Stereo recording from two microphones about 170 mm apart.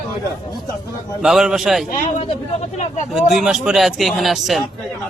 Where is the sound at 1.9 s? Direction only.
45° left (ahead or behind).